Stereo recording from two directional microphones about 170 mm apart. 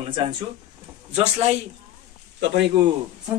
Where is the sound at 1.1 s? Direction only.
40° right (ahead or behind).